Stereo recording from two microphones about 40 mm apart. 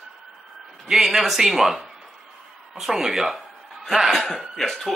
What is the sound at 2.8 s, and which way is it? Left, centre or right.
Speech, centre.